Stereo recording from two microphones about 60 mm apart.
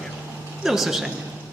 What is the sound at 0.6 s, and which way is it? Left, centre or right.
Speech, centre.